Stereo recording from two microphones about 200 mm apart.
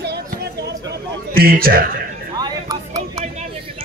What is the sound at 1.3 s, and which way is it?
Speech, 45° right (ahead or behind).